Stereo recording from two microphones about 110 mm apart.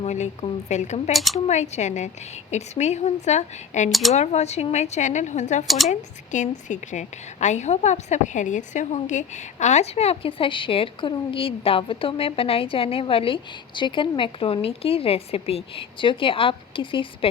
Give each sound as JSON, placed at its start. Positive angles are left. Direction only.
{"t": 0.0, "sound": "speech", "side_deg": 90}
{"t": 1.1, "sound": "speech", "side_deg": 0}
{"t": 1.5, "sound": "speech", "side_deg": 90}
{"t": 5.6, "sound": "speech", "side_deg": 0}
{"t": 5.9, "sound": "a woman's voice", "side_deg": 90}